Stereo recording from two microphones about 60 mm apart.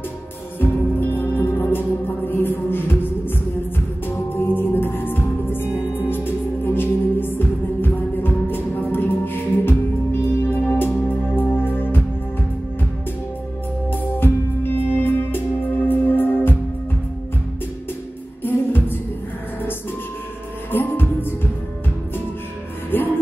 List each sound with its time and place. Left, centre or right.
0.6 s music: left
4.3 s music: left
14.1 s music: left
18.4 s music: left
20.7 s music: left
22.8 s music: left